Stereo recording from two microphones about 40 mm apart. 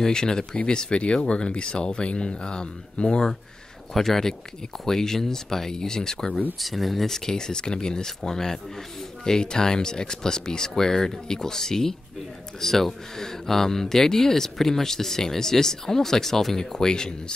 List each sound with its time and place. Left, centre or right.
0.0 s speech: centre
3.9 s speech: centre
6.6 s speech: centre